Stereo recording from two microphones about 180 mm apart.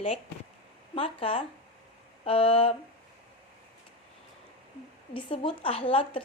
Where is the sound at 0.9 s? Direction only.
30° left (ahead or behind).